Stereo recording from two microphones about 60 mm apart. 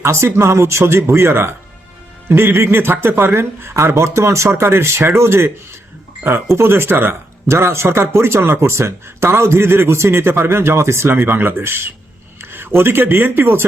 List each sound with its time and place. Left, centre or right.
0.0 s speech: right